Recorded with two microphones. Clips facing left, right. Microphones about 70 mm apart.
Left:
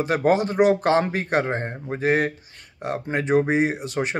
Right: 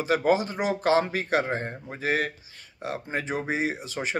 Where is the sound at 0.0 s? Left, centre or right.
Left.